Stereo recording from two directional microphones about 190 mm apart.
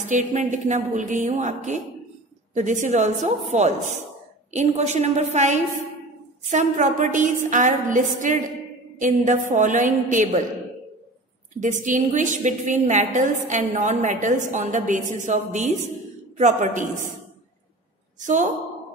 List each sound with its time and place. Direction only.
0.1 s a woman's voice: 40° right (ahead or behind)
11.6 s a woman's voice: 40° right (ahead or behind)
18.2 s a woman's voice: 40° right (ahead or behind)